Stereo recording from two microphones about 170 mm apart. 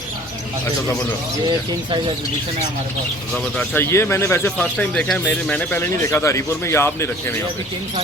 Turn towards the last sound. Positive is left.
turn(degrees=15)  # may be behind; listen again after turning